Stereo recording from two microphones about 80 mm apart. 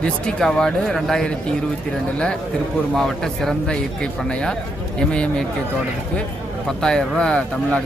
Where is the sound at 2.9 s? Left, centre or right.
Centre.